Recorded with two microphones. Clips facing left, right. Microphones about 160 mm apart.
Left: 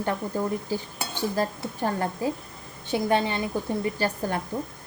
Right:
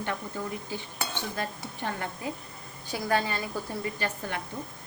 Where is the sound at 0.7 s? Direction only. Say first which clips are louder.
Left 4 dB; 40° left (ahead or behind).